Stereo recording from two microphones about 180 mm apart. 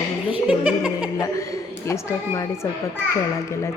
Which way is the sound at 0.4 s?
5° right (ahead or behind).